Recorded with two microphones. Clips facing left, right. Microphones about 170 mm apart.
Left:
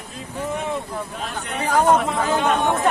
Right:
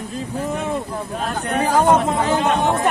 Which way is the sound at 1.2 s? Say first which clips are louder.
Right 7 dB; 45° right (ahead or behind).